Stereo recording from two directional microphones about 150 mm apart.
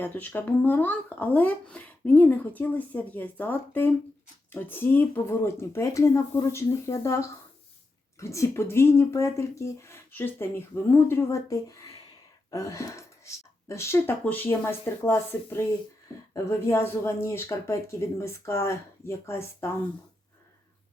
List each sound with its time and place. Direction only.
0.0 s speech: 10° left (ahead or behind)